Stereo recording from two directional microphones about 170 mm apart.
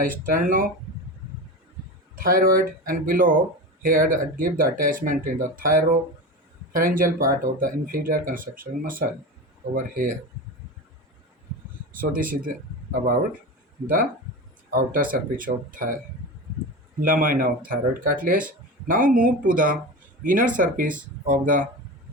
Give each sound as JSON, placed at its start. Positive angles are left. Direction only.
{"t": 0.0, "sound": "speech", "side_deg": -55}
{"t": 2.1, "sound": "speech", "side_deg": -55}
{"t": 11.9, "sound": "speech", "side_deg": -55}
{"t": 13.8, "sound": "speech", "side_deg": -55}
{"t": 17.0, "sound": "speech", "side_deg": -55}